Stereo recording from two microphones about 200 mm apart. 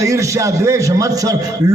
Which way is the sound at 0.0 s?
15° right (ahead or behind).